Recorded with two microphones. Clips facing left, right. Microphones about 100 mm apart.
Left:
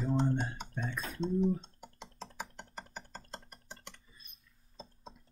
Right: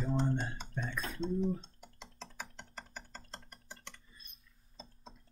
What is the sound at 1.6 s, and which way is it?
Computer keyboard, 15° left (ahead or behind).